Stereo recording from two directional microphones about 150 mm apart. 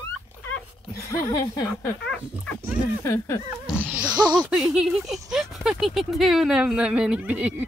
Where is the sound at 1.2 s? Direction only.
20° left (ahead or behind).